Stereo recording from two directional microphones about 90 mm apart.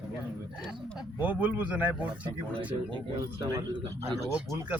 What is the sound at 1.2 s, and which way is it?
Speech, 15° right (ahead or behind).